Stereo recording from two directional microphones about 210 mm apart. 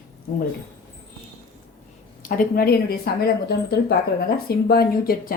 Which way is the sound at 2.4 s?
45° left (ahead or behind).